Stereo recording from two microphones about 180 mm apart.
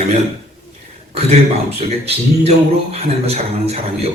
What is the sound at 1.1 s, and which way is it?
A man's voice, 35° right (ahead or behind).